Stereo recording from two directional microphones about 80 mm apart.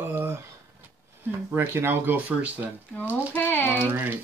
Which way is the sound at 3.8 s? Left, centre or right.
Right.